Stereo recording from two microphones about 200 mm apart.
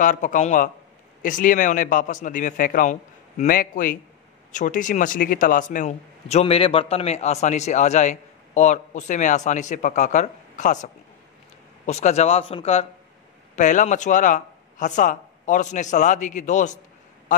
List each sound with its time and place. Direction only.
0.0 s a man's voice: 40° left (ahead or behind)